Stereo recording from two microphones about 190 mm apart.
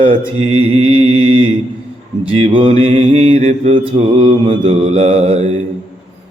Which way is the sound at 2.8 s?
35° right (ahead or behind).